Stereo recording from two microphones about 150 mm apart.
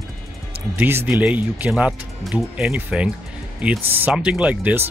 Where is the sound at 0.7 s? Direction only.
15° right (ahead or behind).